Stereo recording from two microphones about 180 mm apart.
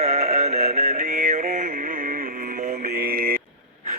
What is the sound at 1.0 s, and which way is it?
Music, 45° right (ahead or behind).